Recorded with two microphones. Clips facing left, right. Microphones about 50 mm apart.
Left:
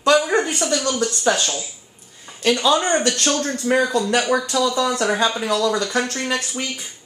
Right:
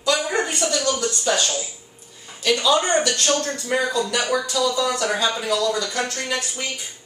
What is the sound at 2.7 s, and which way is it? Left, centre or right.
Speech, left.